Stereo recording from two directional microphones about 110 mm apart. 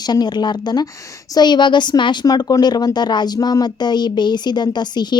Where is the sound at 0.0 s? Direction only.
40° left (ahead or behind).